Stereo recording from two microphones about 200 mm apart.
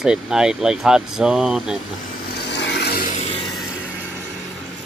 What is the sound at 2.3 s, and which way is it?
Vehicle, 60° left (ahead or behind).